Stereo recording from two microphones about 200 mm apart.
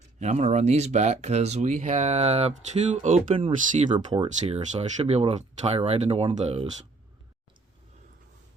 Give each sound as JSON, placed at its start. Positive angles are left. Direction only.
{"t": 0.2, "sound": "speech", "side_deg": -35}